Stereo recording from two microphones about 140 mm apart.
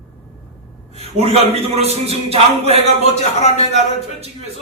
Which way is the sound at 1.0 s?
50° right (ahead or behind).